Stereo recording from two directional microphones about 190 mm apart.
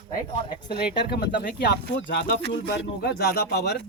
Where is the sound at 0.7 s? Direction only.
60° left (ahead or behind).